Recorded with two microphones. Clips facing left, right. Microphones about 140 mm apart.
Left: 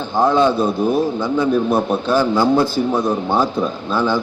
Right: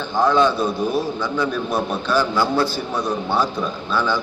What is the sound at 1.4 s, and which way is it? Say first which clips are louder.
A man's voice: left 7 dB; 25° left (ahead or behind).